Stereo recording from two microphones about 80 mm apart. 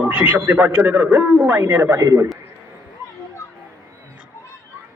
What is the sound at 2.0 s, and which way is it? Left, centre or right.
Speech, right.